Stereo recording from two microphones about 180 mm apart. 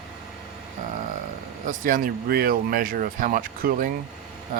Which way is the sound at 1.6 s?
45° right (ahead or behind).